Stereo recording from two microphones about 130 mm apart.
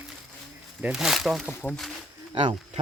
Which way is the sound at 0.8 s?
5° right (ahead or behind).